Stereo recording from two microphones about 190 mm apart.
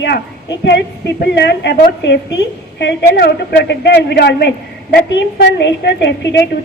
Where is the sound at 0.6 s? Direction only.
65° left (ahead or behind).